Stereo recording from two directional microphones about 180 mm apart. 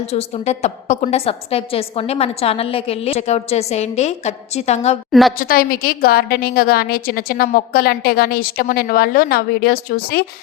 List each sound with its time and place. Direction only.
0.0 s a woman's voice: 35° left (ahead or behind)
5.4 s a woman's voice: 55° left (ahead or behind)